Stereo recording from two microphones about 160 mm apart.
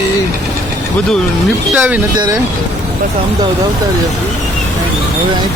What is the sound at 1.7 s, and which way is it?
Speech, 10° right (ahead or behind).